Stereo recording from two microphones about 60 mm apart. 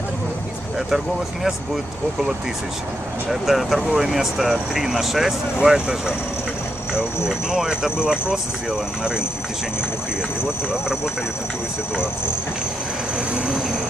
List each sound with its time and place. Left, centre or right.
3.2 s speech: centre
7.3 s speech: centre
10.4 s speech: centre
13.1 s speech: centre